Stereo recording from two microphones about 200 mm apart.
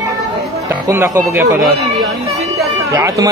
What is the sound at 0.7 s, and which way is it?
Speech, 15° right (ahead or behind).